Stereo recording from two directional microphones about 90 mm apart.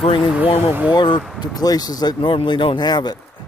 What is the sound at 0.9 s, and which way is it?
Speech, 60° left (ahead or behind).